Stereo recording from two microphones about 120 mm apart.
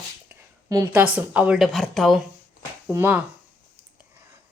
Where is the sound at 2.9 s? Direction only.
20° right (ahead or behind).